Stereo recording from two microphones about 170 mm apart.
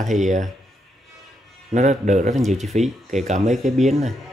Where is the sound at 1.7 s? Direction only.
40° right (ahead or behind).